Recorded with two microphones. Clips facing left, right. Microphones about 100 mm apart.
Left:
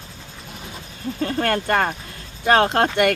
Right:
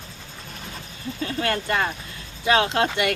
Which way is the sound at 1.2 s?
50° left (ahead or behind).